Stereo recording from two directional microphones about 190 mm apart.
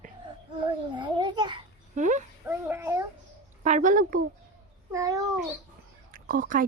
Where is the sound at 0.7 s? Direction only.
25° right (ahead or behind).